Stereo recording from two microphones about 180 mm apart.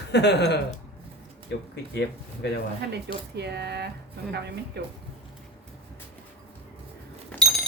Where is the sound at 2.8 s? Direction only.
65° right (ahead or behind).